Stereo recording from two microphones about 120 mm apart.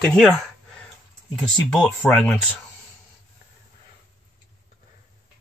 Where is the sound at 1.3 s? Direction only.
5° left (ahead or behind).